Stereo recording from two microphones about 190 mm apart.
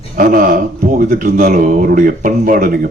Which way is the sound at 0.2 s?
45° right (ahead or behind).